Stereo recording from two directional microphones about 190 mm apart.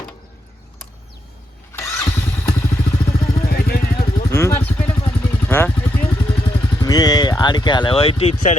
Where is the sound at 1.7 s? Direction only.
15° left (ahead or behind).